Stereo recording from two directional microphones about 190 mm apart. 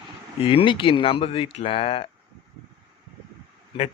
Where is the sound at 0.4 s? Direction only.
30° left (ahead or behind).